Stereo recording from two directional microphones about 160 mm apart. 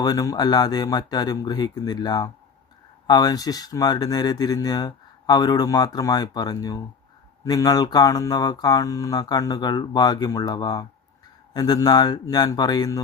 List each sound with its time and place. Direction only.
0.0 s speech: 25° left (ahead or behind)